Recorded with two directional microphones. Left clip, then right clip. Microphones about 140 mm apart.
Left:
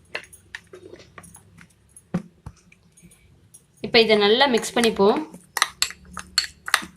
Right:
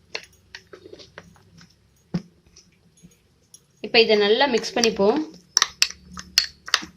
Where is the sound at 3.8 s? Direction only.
30° right (ahead or behind).